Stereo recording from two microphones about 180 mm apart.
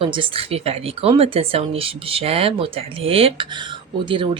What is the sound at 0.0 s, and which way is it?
Speech, 30° right (ahead or behind).